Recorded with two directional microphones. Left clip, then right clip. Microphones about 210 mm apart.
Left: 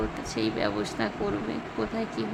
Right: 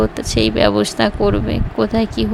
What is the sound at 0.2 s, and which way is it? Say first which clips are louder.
A woman's voice: right 13 dB; 35° right (ahead or behind).